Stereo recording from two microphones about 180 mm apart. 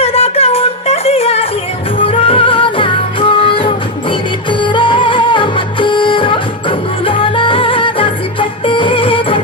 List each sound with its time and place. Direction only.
0.0 s music: 35° left (ahead or behind)